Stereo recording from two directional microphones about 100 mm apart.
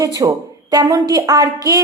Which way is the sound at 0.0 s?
35° right (ahead or behind).